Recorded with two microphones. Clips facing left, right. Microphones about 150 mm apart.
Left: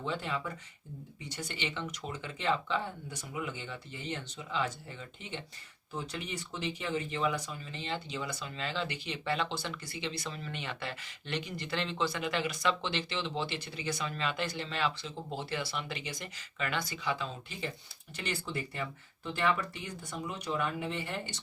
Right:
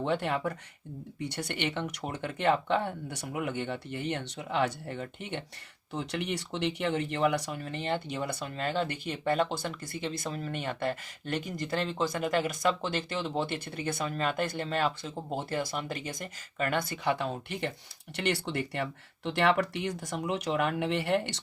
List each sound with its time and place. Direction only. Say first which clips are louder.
0.0 s speech: right 6 dB; 60° right (ahead or behind)
5.9 s speech: right 6 dB; 75° right (ahead or behind)
18.2 s speech: right 6 dB; 75° right (ahead or behind)